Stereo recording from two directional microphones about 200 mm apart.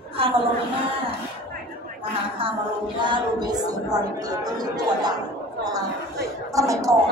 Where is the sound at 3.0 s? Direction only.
20° right (ahead or behind).